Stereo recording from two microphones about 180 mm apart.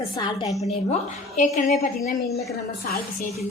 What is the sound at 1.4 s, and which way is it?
A woman's voice, 45° left (ahead or behind).